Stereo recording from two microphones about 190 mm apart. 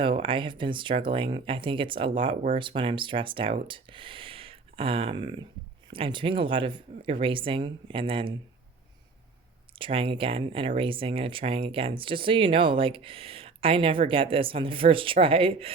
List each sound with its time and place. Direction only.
0.0 s speech: 25° right (ahead or behind)
9.7 s speech: 30° right (ahead or behind)